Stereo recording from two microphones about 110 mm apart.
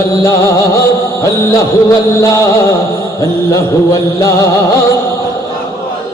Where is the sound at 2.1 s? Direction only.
30° left (ahead or behind).